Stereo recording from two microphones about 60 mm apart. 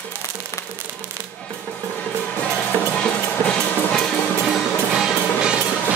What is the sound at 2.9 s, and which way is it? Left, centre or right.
Music, centre.